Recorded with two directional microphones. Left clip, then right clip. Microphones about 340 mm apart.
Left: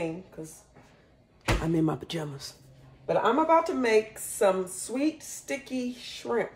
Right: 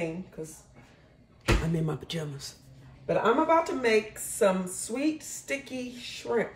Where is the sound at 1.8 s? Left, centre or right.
Centre.